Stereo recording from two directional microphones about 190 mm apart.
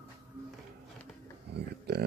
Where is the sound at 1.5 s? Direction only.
60° right (ahead or behind).